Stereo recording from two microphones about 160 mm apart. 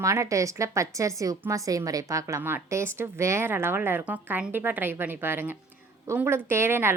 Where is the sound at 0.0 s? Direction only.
20° right (ahead or behind).